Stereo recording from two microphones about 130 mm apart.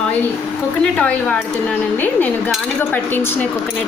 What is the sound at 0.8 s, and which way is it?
Speech, 10° left (ahead or behind).